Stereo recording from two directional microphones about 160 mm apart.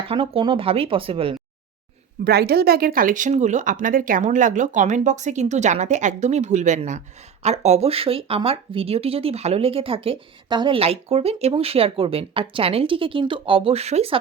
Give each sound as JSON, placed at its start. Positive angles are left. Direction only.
{"t": 0.1, "sound": "speech", "side_deg": -35}
{"t": 2.2, "sound": "speech", "side_deg": -80}